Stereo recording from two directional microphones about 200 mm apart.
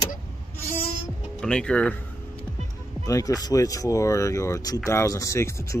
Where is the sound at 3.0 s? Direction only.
15° left (ahead or behind).